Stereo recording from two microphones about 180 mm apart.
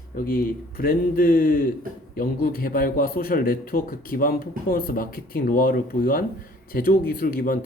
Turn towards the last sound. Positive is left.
turn(degrees=55)  # may be behind; listen again after turning